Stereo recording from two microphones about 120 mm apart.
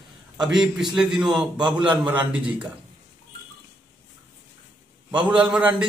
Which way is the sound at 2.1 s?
10° right (ahead or behind).